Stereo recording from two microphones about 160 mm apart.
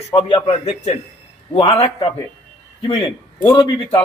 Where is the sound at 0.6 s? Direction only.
45° left (ahead or behind).